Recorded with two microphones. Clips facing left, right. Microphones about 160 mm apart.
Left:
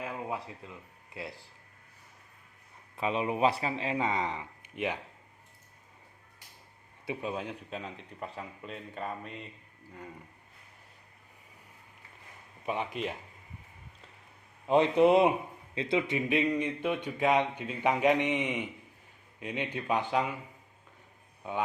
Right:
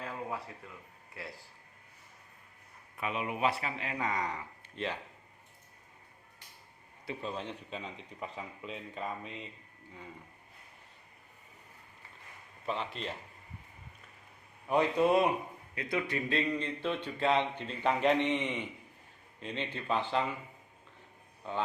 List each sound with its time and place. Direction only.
0.0 s speech: 20° left (ahead or behind)
3.0 s speech: 30° left (ahead or behind); by 4.9 s 15° left (ahead or behind)
7.0 s speech: 10° left (ahead or behind)
12.6 s speech: 10° left (ahead or behind)
14.7 s speech: 20° left (ahead or behind)
21.4 s speech: 10° left (ahead or behind)